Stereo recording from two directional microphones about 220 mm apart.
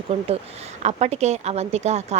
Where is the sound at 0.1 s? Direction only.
25° right (ahead or behind).